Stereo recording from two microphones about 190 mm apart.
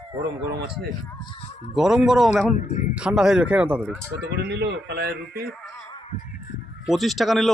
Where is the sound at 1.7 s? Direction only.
5° right (ahead or behind).